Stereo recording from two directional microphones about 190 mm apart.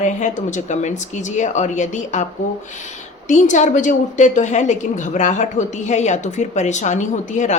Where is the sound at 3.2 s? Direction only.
40° left (ahead or behind).